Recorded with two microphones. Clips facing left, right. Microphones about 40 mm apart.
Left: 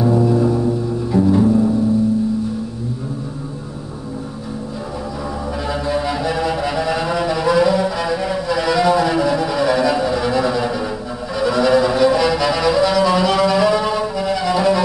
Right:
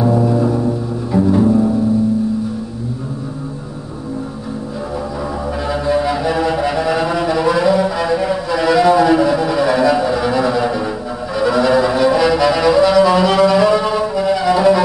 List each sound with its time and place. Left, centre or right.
0.0 s music: centre
5.7 s music: centre
11.3 s violin: centre